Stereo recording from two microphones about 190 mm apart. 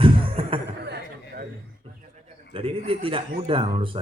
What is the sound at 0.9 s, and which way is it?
Speech, 50° right (ahead or behind).